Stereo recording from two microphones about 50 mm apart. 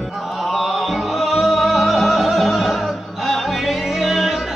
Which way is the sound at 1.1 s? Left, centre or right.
Centre.